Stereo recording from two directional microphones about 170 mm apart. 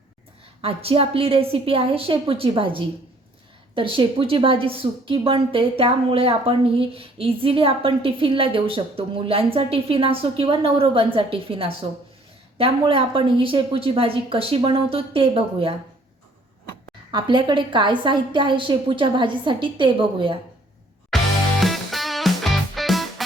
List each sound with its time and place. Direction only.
0.6 s a woman's voice: 35° right (ahead or behind)
17.1 s a woman's voice: 25° right (ahead or behind)
21.1 s music: centre (ahead or behind)